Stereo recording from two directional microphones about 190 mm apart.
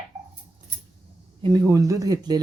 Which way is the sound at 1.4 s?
20° right (ahead or behind).